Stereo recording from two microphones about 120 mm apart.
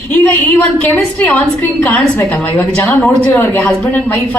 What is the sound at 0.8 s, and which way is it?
A woman's voice, 15° left (ahead or behind).